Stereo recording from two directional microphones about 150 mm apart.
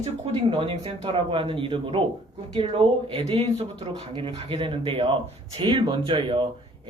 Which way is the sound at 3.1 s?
40° right (ahead or behind).